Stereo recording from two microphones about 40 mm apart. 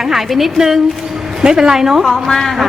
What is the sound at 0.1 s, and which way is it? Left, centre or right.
Speech, centre.